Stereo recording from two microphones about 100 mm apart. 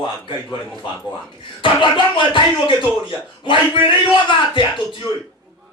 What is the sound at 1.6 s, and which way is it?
A man's voice, 55° left (ahead or behind).